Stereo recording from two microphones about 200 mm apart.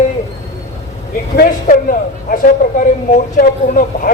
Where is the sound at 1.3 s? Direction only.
45° left (ahead or behind).